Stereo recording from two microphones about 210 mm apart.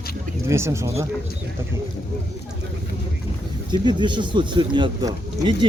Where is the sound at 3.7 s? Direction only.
20° right (ahead or behind).